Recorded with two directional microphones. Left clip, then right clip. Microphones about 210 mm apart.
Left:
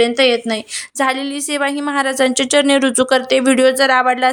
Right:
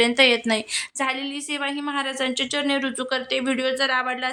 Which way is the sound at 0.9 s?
25° left (ahead or behind).